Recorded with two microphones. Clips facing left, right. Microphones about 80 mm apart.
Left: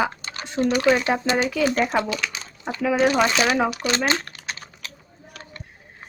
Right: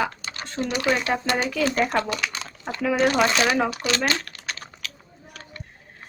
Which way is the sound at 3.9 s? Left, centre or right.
Left.